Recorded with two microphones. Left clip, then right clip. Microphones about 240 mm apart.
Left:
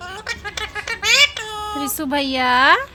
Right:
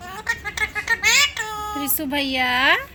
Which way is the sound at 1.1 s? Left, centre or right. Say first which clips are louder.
Left 7 dB; centre.